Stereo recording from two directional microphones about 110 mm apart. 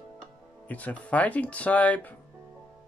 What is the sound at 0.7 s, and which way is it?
Speech, 15° left (ahead or behind).